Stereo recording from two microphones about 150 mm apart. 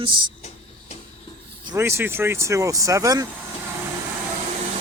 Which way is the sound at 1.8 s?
15° right (ahead or behind).